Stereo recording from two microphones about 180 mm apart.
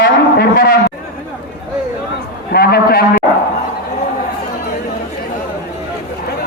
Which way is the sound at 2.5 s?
60° left (ahead or behind).